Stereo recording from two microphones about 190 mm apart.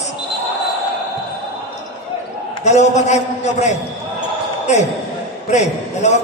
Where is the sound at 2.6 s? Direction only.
35° left (ahead or behind).